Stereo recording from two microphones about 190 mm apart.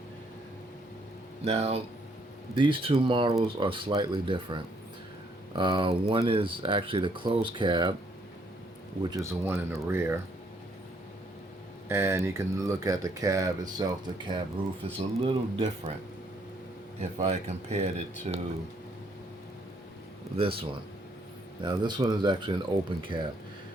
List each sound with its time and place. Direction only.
1.5 s speech: 35° right (ahead or behind)
9.0 s speech: 15° right (ahead or behind)
11.9 s speech: 15° right (ahead or behind)
17.0 s speech: 35° right (ahead or behind)
20.3 s speech: 30° right (ahead or behind)